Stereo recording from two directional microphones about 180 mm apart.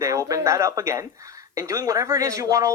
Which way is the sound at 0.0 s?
20° right (ahead or behind).